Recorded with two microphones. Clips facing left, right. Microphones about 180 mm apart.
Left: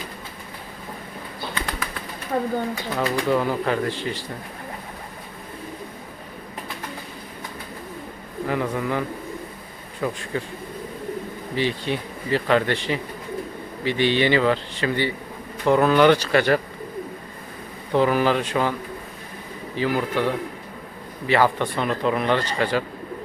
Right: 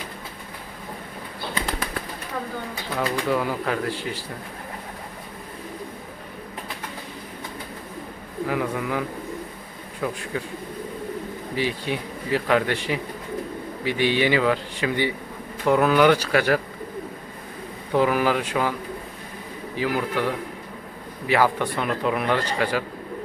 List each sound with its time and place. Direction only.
2.3 s speech: 45° left (ahead or behind)
2.9 s a man's voice: centre (ahead or behind)
8.4 s a man's voice: 5° right (ahead or behind)
11.5 s speech: 10° right (ahead or behind)
17.9 s speech: 5° right (ahead or behind)
19.7 s speech: 10° right (ahead or behind)